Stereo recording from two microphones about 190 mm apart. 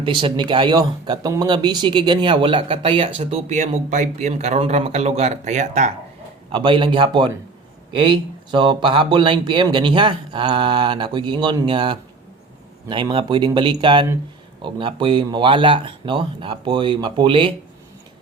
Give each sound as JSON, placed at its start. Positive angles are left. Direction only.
{"t": 0.0, "sound": "speech", "side_deg": -25}
{"t": 6.5, "sound": "speech", "side_deg": -25}